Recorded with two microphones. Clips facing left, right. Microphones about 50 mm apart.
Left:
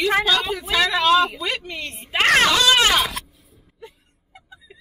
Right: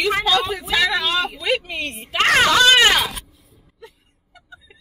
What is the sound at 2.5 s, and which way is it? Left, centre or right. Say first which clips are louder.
Dog: right 3 dB; right.